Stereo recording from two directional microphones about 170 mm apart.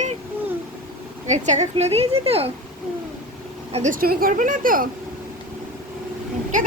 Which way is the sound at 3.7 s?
45° right (ahead or behind).